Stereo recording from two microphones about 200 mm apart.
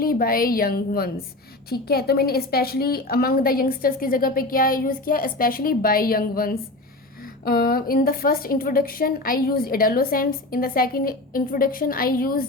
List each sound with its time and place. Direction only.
0.0 s a woman's voice: 45° left (ahead or behind)